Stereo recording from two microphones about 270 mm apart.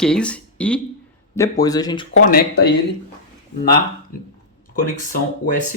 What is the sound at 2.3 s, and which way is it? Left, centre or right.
Speech, left.